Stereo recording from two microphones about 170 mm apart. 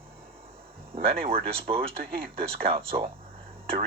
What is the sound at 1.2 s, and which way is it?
Speech, 35° right (ahead or behind).